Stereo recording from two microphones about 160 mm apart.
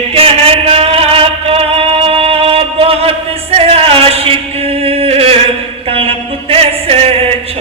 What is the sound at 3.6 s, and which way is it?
Chant, 35° right (ahead or behind).